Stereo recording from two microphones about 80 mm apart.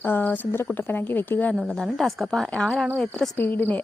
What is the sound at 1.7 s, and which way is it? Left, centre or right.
A woman's voice, centre.